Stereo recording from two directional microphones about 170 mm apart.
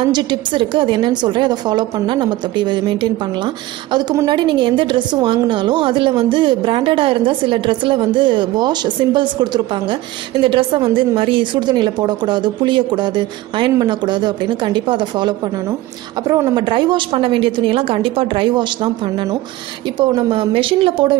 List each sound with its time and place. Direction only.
0.0 s a woman's voice: 25° right (ahead or behind)